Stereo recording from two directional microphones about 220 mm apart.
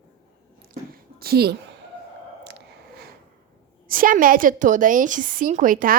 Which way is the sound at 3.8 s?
40° right (ahead or behind).